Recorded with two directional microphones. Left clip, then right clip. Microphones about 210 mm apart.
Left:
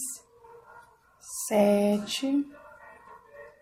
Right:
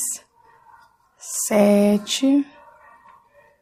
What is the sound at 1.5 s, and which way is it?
Speech, 25° right (ahead or behind).